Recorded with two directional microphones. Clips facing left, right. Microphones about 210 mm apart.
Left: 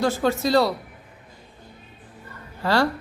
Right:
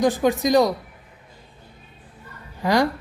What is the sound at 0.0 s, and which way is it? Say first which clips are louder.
Speech: right 3 dB; 15° right (ahead or behind).